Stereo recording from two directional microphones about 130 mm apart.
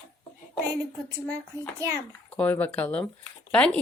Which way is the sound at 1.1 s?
25° right (ahead or behind).